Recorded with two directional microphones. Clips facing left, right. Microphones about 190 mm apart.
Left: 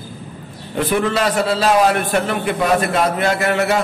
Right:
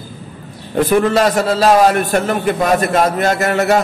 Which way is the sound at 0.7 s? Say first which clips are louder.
Right 5 dB; 45° right (ahead or behind).